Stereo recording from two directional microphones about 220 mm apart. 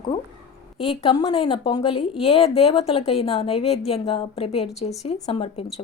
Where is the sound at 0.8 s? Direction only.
25° left (ahead or behind).